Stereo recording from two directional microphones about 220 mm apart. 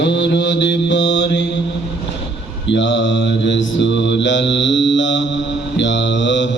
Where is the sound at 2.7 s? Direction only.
55° left (ahead or behind).